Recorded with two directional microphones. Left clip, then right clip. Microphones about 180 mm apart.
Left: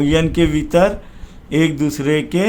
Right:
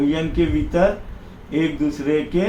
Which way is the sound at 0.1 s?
70° left (ahead or behind).